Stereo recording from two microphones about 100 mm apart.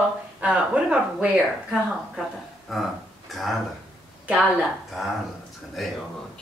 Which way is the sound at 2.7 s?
Centre (ahead or behind).